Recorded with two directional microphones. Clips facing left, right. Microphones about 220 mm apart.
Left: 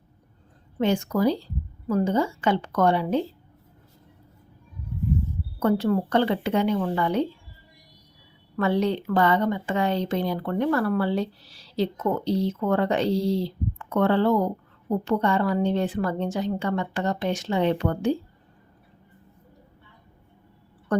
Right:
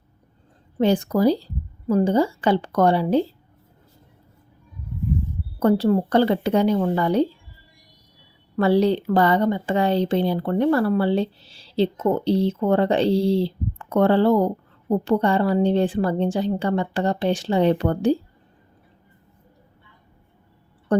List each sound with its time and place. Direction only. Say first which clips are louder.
0.8 s speech: right 4 dB; 35° right (ahead or behind)
5.5 s speech: right 4 dB; 35° right (ahead or behind)
8.5 s speech: right 5 dB; 35° right (ahead or behind)
20.9 s a woman's voice: right 4 dB; 30° right (ahead or behind)